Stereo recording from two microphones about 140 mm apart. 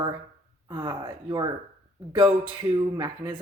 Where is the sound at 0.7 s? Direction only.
30° right (ahead or behind).